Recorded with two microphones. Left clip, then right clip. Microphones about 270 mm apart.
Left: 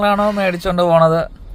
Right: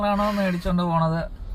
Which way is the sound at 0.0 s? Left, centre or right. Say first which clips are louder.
Left 8 dB; left.